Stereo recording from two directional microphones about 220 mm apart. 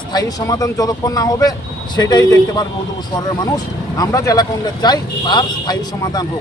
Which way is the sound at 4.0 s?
15° left (ahead or behind).